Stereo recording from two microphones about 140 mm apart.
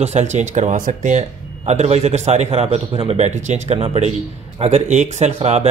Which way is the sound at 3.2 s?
55° right (ahead or behind).